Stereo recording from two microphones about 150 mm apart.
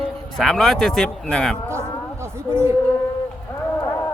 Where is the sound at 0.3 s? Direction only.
Centre (ahead or behind).